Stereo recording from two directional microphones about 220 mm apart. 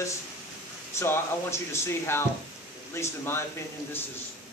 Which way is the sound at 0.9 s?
10° left (ahead or behind).